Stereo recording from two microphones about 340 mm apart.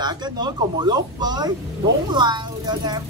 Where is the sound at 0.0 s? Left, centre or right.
Centre.